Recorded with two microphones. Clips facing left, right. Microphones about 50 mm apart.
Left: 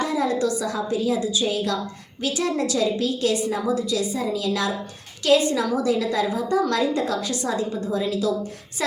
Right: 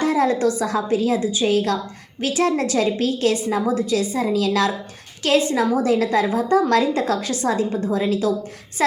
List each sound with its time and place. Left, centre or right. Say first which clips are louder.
0.0 s a woman's voice: right 4 dB; right
1.2 s a woman's voice: right 3 dB; right
1.5 s a woman's voice: right 5 dB; right
5.2 s a woman's voice: right 1 dB; right